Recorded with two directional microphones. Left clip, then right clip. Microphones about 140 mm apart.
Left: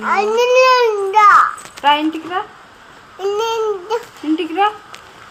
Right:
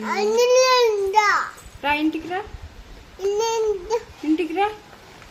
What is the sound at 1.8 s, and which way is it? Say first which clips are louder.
A woman's voice: left 7 dB; 40° right (ahead or behind).